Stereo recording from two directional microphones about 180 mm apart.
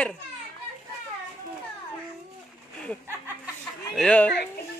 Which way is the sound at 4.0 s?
5° left (ahead or behind).